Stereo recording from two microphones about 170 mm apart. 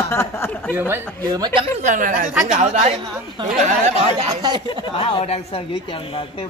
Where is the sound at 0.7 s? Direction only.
15° right (ahead or behind).